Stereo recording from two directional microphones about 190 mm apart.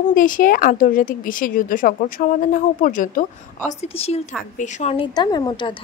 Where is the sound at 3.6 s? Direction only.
30° left (ahead or behind).